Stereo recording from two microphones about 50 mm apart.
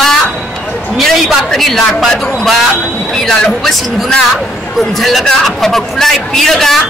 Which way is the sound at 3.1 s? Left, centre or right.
Centre.